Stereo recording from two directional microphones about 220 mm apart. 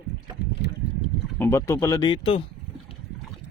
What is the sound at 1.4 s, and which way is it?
Speech, 10° left (ahead or behind).